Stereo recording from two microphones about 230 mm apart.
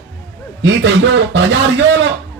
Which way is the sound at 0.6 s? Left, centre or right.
Right.